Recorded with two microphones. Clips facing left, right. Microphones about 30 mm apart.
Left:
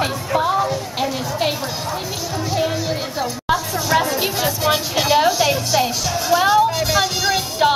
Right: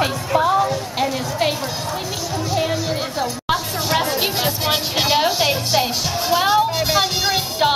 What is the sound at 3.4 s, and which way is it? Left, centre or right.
Music, right.